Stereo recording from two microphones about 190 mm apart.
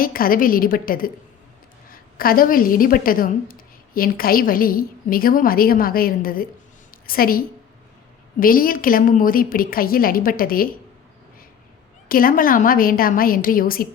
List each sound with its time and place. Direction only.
0.0 s a woman's voice: 50° left (ahead or behind)
12.0 s a woman's voice: 50° left (ahead or behind)